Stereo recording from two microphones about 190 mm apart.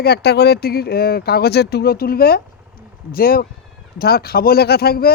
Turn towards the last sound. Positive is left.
turn(degrees=55)  # may be behind; listen again after turning